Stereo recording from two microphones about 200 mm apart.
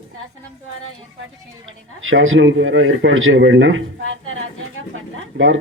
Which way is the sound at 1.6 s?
80° right.